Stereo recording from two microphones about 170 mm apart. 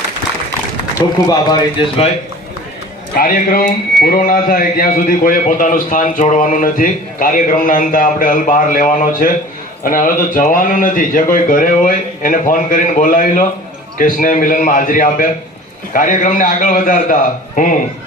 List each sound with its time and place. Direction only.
0.9 s a man's voice: 20° left (ahead or behind)
3.2 s a man's voice: 60° left (ahead or behind)